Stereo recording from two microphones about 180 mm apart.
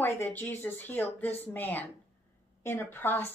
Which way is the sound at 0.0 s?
10° left (ahead or behind).